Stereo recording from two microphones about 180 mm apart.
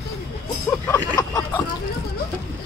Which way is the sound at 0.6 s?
10° left (ahead or behind).